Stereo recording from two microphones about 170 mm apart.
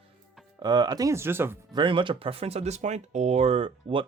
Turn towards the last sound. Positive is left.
turn(degrees=-30)  # may be behind; listen again after turning